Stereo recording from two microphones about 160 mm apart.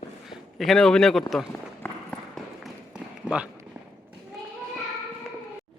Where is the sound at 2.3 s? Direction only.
5° right (ahead or behind).